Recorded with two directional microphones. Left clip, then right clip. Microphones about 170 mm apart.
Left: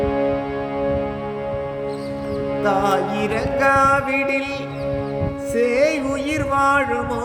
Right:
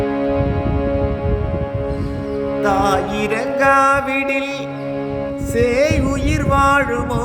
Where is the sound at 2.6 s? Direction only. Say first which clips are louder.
Right 2 dB; 30° right (ahead or behind).